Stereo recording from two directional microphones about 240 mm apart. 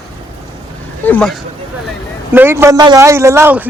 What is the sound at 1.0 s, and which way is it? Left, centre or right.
Speech, centre.